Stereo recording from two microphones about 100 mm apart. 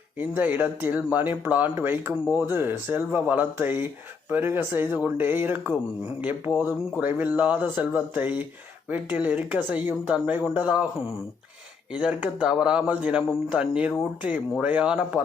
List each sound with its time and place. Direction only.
0.2 s a woman's voice: 15° right (ahead or behind)
11.9 s a woman's voice: 10° right (ahead or behind)